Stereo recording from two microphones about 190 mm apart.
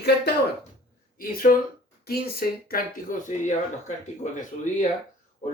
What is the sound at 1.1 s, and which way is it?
Speech, 50° left (ahead or behind).